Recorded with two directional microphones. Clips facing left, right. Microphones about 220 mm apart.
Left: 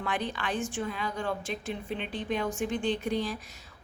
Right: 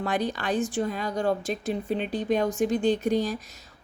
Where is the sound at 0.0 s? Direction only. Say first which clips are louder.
Right 5 dB; 40° right (ahead or behind).